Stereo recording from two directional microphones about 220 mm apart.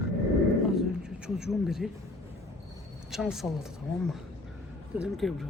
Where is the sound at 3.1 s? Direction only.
Centre (ahead or behind).